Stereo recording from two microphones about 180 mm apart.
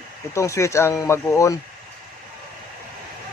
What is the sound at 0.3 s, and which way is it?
A man's voice, 15° left (ahead or behind).